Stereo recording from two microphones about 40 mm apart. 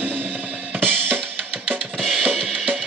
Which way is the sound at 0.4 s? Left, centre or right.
Right.